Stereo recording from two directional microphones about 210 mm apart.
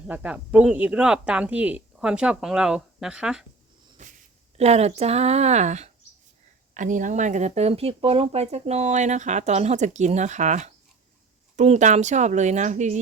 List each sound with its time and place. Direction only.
0.1 s speech: 5° right (ahead or behind)
4.5 s speech: 30° right (ahead or behind)